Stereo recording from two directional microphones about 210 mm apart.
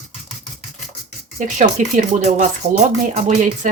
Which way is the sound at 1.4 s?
35° right (ahead or behind).